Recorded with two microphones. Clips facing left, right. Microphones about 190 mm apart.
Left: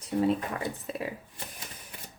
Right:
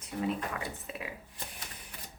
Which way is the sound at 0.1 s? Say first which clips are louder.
Left 7 dB; 30° left (ahead or behind).